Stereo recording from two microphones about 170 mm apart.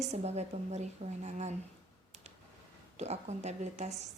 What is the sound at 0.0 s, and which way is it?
A woman's voice, 40° right (ahead or behind).